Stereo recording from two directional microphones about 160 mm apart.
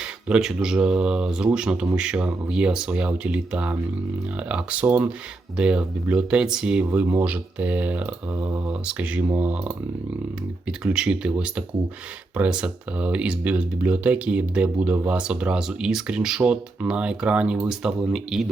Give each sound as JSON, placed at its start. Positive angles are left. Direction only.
{"t": 0.0, "sound": "speech", "side_deg": -5}